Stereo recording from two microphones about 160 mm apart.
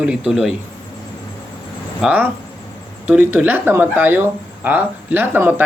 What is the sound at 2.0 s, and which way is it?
Speech, 5° right (ahead or behind).